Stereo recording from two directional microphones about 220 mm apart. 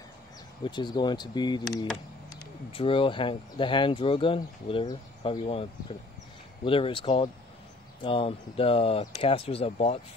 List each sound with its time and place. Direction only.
0.7 s speech: 20° left (ahead or behind)